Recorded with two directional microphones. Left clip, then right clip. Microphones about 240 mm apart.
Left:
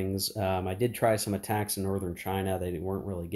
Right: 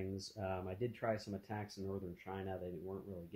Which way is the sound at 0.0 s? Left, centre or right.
Centre.